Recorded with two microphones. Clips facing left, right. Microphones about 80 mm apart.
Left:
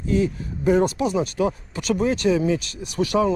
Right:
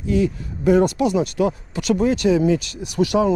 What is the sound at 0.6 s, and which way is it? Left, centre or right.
Speech, right.